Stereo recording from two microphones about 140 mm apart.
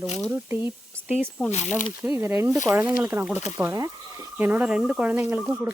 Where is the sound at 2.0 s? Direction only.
10° right (ahead or behind).